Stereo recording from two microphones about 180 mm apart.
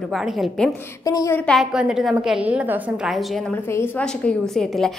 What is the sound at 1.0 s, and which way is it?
Speech, 20° left (ahead or behind).